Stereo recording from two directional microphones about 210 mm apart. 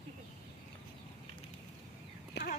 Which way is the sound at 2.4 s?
55° left (ahead or behind).